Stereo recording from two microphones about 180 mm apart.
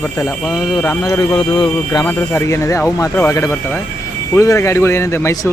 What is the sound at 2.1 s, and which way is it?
Speech, 10° left (ahead or behind).